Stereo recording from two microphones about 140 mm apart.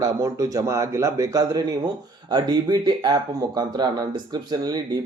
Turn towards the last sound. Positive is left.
turn(degrees=-30)  # may be behind; listen again after turning